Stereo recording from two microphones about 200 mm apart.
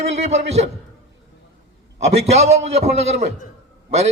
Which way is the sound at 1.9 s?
35° right (ahead or behind).